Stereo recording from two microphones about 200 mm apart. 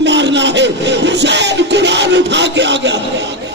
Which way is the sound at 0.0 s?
60° right (ahead or behind).